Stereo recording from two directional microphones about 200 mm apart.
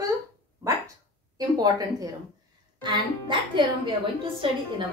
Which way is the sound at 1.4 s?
20° right (ahead or behind).